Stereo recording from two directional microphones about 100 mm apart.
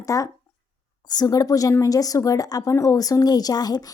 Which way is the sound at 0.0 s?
35° left (ahead or behind).